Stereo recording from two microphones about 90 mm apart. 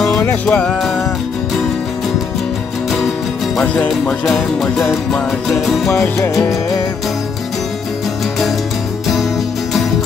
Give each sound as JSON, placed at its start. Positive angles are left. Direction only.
{"t": 0.1, "sound": "music", "side_deg": 20}
{"t": 0.5, "sound": "music", "side_deg": 10}
{"t": 3.6, "sound": "music", "side_deg": 15}
{"t": 4.3, "sound": "music", "side_deg": 0}
{"t": 5.9, "sound": "music", "side_deg": 30}